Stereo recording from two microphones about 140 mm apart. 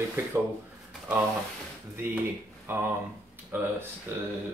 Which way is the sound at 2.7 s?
15° right (ahead or behind).